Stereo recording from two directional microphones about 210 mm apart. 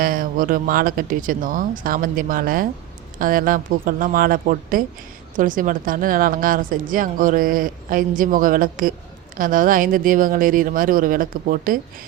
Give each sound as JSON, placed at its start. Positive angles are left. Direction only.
{"t": 0.0, "sound": "speech", "side_deg": -40}